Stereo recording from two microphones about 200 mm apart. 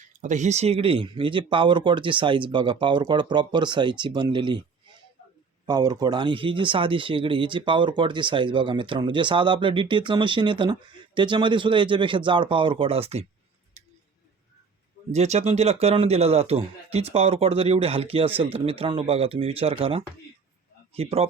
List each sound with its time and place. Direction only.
0.2 s speech: 35° right (ahead or behind)
5.6 s speech: 20° right (ahead or behind)
15.1 s speech: 35° right (ahead or behind)